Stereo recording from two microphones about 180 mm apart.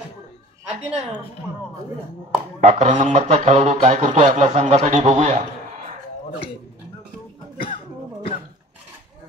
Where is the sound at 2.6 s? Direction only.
35° right (ahead or behind).